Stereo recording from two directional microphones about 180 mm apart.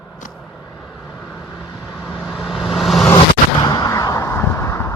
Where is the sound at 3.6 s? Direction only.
20° left (ahead or behind).